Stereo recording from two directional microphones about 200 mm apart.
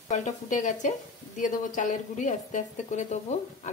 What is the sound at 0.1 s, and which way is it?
Speech, 35° left (ahead or behind).